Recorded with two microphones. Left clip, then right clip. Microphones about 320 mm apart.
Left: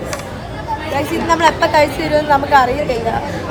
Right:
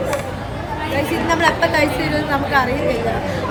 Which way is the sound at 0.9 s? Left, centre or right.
Centre.